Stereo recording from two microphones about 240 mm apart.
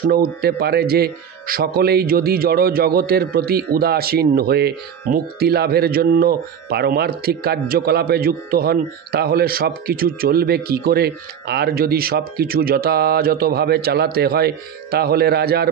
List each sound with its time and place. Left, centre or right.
0.1 s a man's voice: right